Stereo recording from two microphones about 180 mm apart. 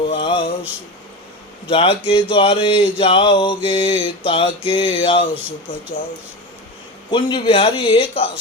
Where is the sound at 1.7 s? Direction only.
30° left (ahead or behind).